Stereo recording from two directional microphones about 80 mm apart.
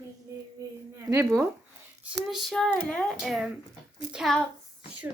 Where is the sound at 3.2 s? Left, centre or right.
Centre.